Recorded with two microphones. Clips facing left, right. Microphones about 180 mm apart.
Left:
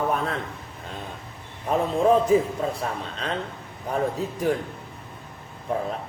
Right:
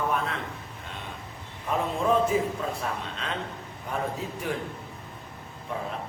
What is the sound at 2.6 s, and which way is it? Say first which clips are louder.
Speech: left 4 dB; 35° left (ahead or behind).